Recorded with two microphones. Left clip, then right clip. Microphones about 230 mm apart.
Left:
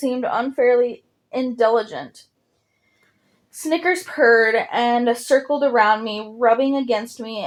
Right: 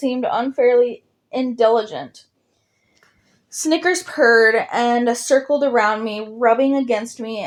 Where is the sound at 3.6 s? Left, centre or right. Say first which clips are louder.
Right 2 dB; right.